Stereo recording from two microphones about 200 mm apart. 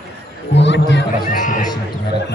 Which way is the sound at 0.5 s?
60° left (ahead or behind).